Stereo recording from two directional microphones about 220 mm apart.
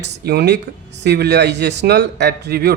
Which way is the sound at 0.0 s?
50° right (ahead or behind).